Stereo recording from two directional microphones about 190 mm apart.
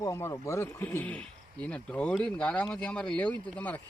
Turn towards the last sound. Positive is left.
turn(degrees=10)  # may be behind; listen again after turning